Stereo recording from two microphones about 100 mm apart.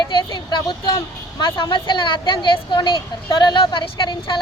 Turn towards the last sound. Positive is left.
turn(degrees=55)  # may be behind; listen again after turning